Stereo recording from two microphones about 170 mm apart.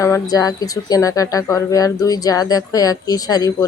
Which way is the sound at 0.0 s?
20° left (ahead or behind).